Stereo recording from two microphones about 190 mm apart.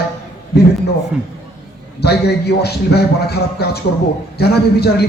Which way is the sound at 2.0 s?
60° left (ahead or behind).